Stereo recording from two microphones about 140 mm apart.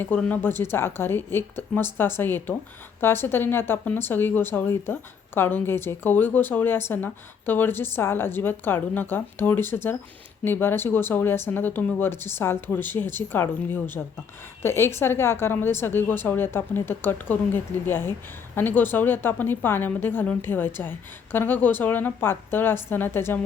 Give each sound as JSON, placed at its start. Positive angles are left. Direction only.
{"t": 0.0, "sound": "speech", "side_deg": 10}